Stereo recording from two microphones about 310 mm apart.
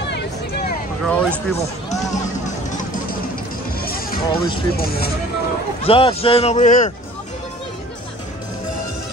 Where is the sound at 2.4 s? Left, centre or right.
Left.